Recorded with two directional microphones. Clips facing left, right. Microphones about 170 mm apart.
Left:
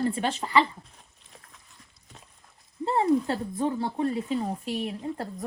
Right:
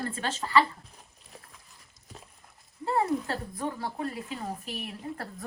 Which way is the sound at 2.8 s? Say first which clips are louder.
Left 4 dB; 25° left (ahead or behind).